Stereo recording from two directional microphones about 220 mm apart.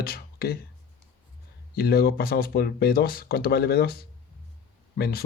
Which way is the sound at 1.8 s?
45° left (ahead or behind).